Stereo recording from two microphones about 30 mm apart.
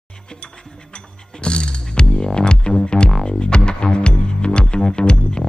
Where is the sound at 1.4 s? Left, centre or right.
Left.